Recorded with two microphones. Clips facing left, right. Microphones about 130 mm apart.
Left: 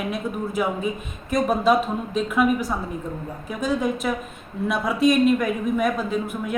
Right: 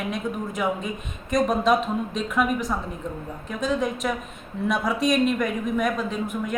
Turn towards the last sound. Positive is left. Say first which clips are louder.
# left 2 dB
turn(degrees=5)  # may be behind; listen again after turning